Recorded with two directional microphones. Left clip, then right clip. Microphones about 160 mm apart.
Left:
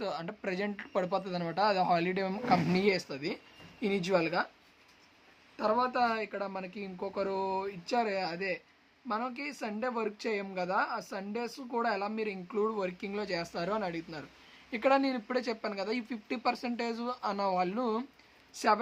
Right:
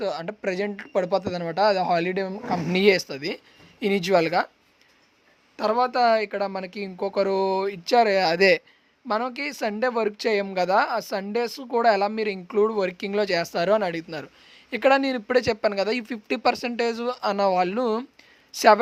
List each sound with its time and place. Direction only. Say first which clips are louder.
0.0 s speech: right 9 dB; 35° right (ahead or behind)
2.7 s speech: right 10 dB; 55° right (ahead or behind)
5.5 s speech: right 7 dB; 65° right (ahead or behind); by 8.6 s 85° right
9.0 s speech: right 9 dB; 65° right (ahead or behind)